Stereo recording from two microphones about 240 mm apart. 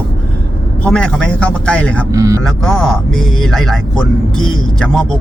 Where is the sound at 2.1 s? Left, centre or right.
Centre.